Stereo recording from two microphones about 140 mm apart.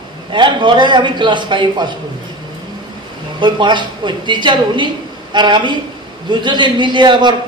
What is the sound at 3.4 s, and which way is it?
A man's voice, 35° right (ahead or behind).